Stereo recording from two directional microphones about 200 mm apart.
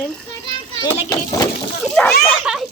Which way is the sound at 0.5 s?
25° left (ahead or behind).